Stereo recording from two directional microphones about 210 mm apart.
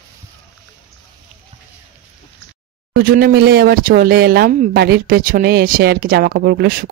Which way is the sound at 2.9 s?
45° right (ahead or behind).